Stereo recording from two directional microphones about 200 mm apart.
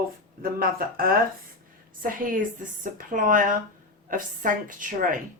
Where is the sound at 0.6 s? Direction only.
45° right (ahead or behind).